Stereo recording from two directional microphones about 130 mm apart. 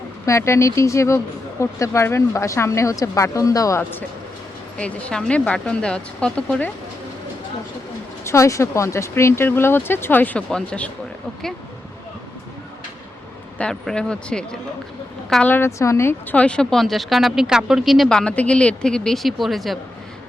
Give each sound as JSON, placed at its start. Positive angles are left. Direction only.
{"t": 0.3, "sound": "speech", "side_deg": 20}
{"t": 4.8, "sound": "speech", "side_deg": 10}
{"t": 8.2, "sound": "speech", "side_deg": 20}
{"t": 13.6, "sound": "speech", "side_deg": 5}
{"t": 15.4, "sound": "speech", "side_deg": 20}